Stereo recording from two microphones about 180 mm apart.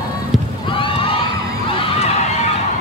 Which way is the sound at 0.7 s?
30° left (ahead or behind).